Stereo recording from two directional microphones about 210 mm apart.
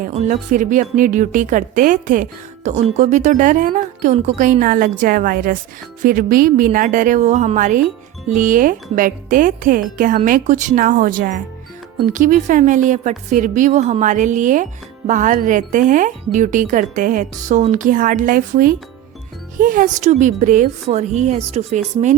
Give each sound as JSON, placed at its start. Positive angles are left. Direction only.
{"t": 0.0, "sound": "a woman's voice", "side_deg": -35}